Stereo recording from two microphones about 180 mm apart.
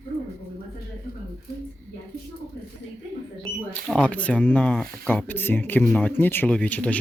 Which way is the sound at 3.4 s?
Centre (ahead or behind).